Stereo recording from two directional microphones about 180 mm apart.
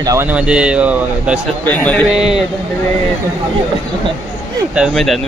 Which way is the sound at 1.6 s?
10° left (ahead or behind).